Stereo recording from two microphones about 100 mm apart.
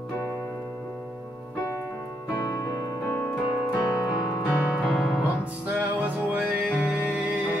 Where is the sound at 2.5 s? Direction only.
30° left (ahead or behind).